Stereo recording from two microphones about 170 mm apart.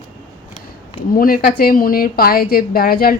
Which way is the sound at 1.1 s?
55° left (ahead or behind).